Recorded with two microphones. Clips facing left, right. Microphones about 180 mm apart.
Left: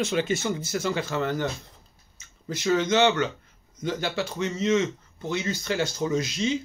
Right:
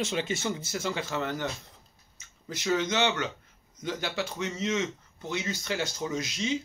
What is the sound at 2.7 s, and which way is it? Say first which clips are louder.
Speech: left 6 dB; 15° right (ahead or behind).